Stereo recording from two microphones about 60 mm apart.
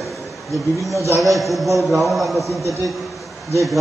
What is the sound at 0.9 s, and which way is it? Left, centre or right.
Speech, right.